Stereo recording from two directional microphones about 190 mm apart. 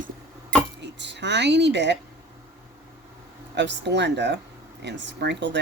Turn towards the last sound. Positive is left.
turn(degrees=-65)  # may be behind; listen again after turning